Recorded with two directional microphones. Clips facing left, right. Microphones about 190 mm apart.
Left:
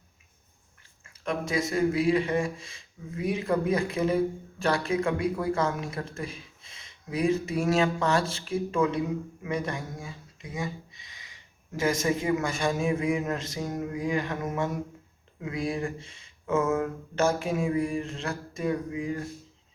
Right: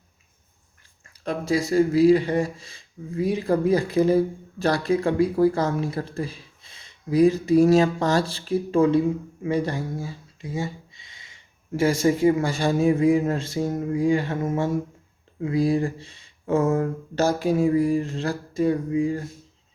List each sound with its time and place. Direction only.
1.2 s speech: 35° right (ahead or behind)